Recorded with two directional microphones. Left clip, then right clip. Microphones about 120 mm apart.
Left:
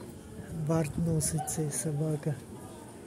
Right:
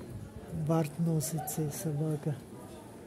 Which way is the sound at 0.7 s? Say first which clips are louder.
Left 1 dB; 20° right (ahead or behind).